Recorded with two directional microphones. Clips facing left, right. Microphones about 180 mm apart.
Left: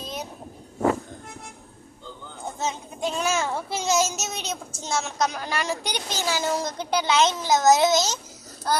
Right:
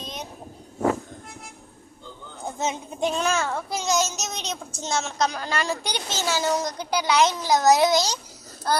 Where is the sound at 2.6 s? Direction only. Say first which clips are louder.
Right 3 dB; 20° right (ahead or behind).